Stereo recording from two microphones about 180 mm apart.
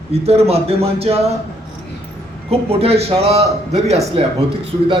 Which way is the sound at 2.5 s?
35° right (ahead or behind).